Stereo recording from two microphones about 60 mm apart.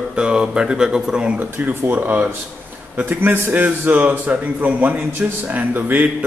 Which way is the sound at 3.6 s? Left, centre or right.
Right.